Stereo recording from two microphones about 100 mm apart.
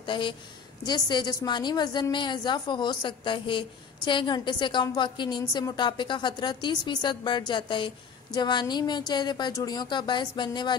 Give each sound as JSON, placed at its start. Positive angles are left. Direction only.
{"t": 0.0, "sound": "a woman's voice", "side_deg": 55}